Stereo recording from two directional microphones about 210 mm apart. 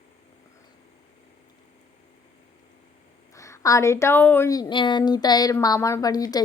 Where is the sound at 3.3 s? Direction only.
15° left (ahead or behind).